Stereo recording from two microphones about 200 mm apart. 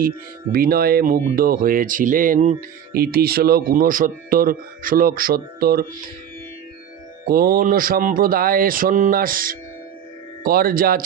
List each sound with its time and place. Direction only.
0.5 s speech: 50° right (ahead or behind)
7.3 s speech: 50° right (ahead or behind)